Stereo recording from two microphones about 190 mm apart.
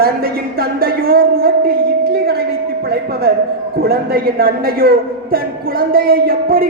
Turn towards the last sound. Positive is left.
turn(degrees=-50)  # may be behind; listen again after turning